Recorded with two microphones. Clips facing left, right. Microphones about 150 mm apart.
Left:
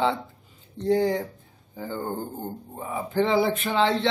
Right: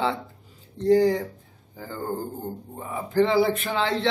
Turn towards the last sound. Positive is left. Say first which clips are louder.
# left 3 dB
turn(degrees=0)  # may be behind; listen again after turning